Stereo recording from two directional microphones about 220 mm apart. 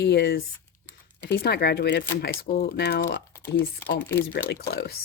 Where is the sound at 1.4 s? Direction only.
45° left (ahead or behind).